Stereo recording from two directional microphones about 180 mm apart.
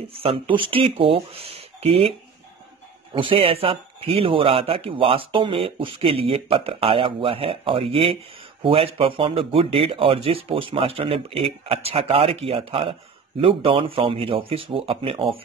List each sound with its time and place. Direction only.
0.1 s a man's voice: 30° right (ahead or behind)
3.2 s a man's voice: 30° right (ahead or behind)